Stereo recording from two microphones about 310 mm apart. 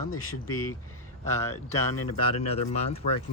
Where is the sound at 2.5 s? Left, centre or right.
Centre.